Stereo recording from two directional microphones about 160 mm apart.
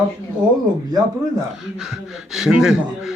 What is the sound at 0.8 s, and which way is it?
Speech, 25° right (ahead or behind).